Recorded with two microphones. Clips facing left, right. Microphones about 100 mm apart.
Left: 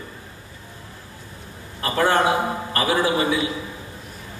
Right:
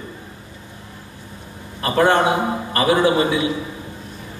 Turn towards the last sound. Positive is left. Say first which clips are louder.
# right 4 dB
turn(degrees=-25)  # may be behind; listen again after turning